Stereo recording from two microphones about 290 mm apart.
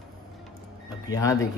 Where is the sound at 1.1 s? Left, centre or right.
Centre.